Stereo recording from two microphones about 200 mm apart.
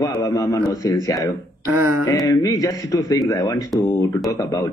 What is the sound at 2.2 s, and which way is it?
A man's voice, 15° left (ahead or behind).